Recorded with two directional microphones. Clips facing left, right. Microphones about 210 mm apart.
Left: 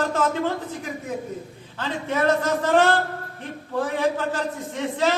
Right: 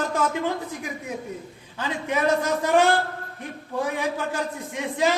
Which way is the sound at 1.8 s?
15° right (ahead or behind).